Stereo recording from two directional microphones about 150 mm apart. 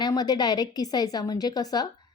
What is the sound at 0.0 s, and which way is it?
Speech, 25° left (ahead or behind).